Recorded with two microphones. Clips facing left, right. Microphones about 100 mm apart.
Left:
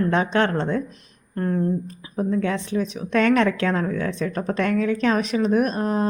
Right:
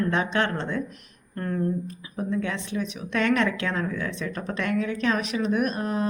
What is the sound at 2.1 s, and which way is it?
Speech, 40° left (ahead or behind).